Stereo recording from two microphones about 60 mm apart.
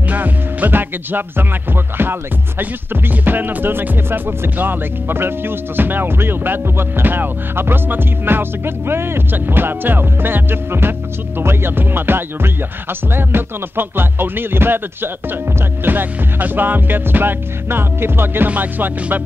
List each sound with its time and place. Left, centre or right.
0.1 s music: right
2.6 s speech: right
18.5 s music: right